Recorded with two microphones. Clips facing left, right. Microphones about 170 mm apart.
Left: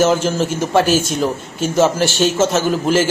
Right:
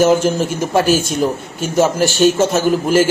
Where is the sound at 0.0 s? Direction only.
10° right (ahead or behind).